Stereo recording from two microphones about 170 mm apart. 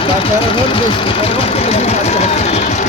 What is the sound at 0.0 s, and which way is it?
Speech, 30° left (ahead or behind).